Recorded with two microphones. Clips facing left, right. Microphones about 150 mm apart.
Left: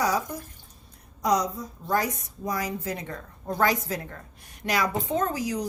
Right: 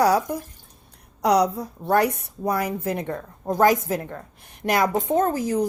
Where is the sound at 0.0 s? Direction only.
60° right (ahead or behind).